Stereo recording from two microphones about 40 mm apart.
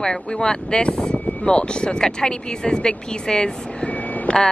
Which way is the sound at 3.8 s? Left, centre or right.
Left.